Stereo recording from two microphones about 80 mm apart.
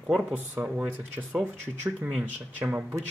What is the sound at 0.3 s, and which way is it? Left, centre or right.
Speech, centre.